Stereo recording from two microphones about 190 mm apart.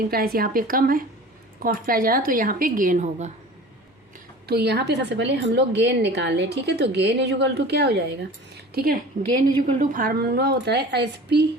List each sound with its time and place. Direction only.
0.1 s a woman's voice: 50° right (ahead or behind)
4.4 s a woman's voice: 60° right (ahead or behind)